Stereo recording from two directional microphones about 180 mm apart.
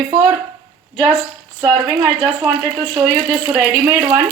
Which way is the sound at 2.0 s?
15° right (ahead or behind).